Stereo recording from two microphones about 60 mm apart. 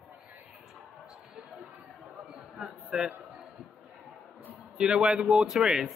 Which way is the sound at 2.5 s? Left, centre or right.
Centre.